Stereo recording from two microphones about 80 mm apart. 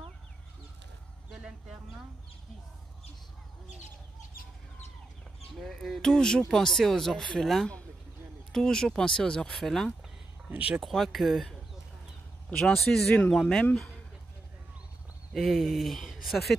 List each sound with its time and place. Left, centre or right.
5.6 s speech: centre
10.5 s speech: centre
10.8 s speech: centre
15.3 s speech: centre